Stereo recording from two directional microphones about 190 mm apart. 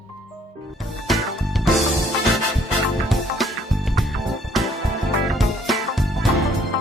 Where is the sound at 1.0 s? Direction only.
Centre (ahead or behind).